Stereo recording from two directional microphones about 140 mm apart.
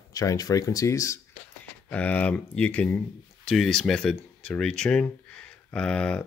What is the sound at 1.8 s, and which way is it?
Speech, 10° left (ahead or behind).